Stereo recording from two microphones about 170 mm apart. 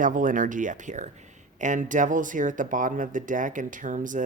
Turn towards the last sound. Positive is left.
turn(degrees=-50)  # may be behind; listen again after turning